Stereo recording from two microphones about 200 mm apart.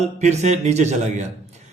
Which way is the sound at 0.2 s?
35° right (ahead or behind).